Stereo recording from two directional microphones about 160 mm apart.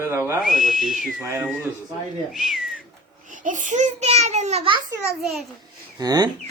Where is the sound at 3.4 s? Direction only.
50° right (ahead or behind).